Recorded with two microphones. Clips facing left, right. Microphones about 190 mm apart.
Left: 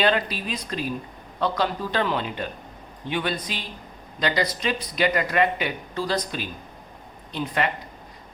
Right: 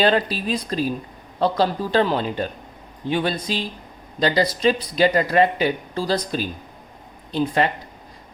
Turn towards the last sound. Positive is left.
turn(degrees=-35)  # may be behind; listen again after turning